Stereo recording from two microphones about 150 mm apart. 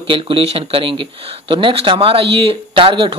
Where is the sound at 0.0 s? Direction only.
35° right (ahead or behind).